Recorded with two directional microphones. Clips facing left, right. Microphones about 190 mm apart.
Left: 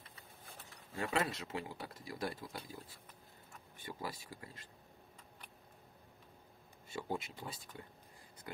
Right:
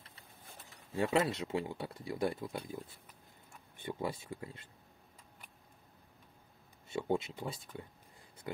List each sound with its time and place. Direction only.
0.9 s speech: 30° right (ahead or behind)
3.8 s speech: 25° right (ahead or behind)
6.9 s speech: 25° right (ahead or behind)